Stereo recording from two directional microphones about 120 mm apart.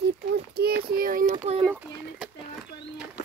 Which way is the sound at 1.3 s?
65° right (ahead or behind).